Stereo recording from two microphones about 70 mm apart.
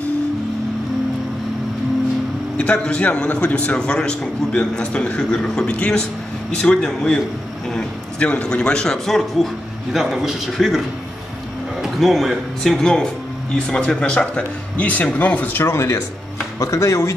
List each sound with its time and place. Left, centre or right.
2.5 s a man's voice: centre
11.8 s a man's voice: centre; by 15.6 s left
15.6 s speech: left